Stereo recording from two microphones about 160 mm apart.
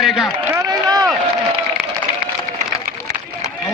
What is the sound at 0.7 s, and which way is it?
Speech, 25° right (ahead or behind).